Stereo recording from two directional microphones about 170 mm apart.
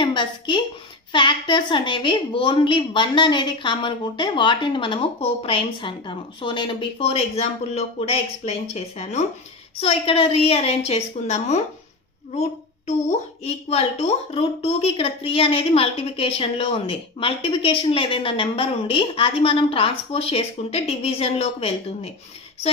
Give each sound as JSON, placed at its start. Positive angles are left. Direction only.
{"t": 0.0, "sound": "a woman's voice", "side_deg": 30}
{"t": 13.4, "sound": "a woman's voice", "side_deg": 40}